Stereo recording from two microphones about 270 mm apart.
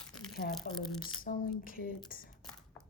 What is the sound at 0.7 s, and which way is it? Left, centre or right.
A woman's voice, left.